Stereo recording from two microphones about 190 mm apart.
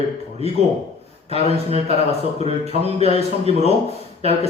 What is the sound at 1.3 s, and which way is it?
Speech, 35° right (ahead or behind).